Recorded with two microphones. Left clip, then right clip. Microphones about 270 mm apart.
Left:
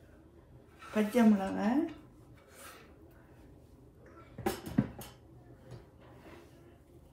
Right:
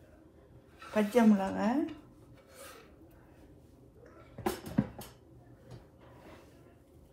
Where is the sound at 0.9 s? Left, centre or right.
Right.